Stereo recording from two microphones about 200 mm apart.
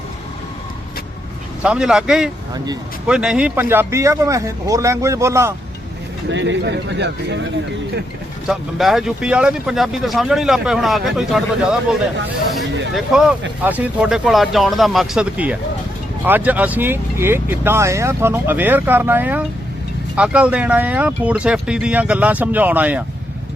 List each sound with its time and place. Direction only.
1.6 s speech: 5° right (ahead or behind)
6.2 s speech: 65° right (ahead or behind)
8.4 s speech: centre (ahead or behind)
12.9 s speech: centre (ahead or behind)